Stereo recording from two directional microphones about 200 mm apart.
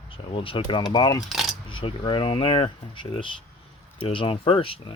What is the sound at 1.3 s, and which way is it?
Cutlery, centre (ahead or behind).